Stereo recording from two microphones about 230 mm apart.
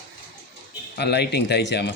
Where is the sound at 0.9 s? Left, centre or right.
Left.